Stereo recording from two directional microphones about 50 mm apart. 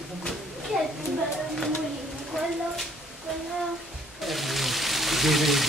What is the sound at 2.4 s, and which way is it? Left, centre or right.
Speech, centre.